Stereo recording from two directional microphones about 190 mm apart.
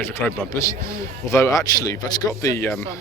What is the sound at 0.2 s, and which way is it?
Speech, 15° left (ahead or behind).